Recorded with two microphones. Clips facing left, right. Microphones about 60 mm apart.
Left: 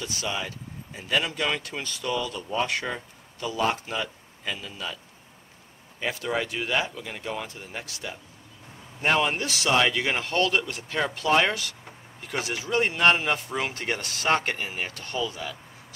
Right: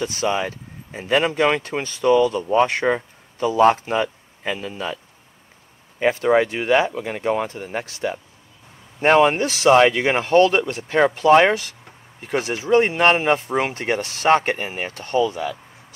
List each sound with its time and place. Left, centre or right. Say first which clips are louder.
0.0 s speech: right 9 dB; right